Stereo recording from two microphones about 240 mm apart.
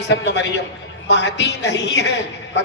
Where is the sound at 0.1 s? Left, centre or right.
Left.